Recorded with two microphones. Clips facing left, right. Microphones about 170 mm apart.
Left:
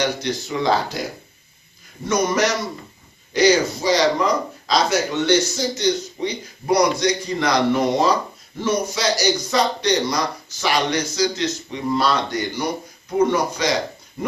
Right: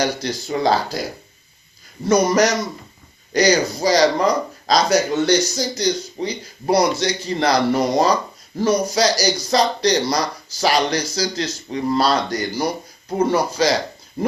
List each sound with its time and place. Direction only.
0.0 s speech: 35° right (ahead or behind)
2.0 s speech: 40° right (ahead or behind)